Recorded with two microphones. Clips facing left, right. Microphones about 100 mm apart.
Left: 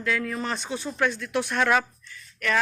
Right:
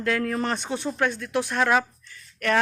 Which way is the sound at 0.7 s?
20° right (ahead or behind).